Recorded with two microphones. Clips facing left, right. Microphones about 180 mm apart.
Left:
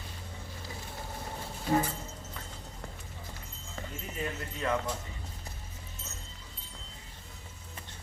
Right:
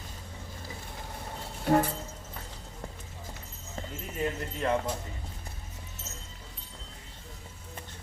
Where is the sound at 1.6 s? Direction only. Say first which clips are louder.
Right 4 dB; 60° right (ahead or behind).